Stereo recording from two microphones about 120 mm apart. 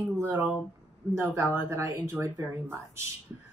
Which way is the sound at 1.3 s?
25° right (ahead or behind).